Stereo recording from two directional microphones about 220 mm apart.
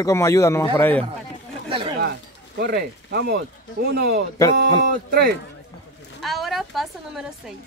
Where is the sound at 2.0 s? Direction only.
50° right (ahead or behind).